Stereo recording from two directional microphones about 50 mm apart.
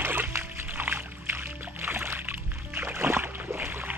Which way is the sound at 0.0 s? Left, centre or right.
Right.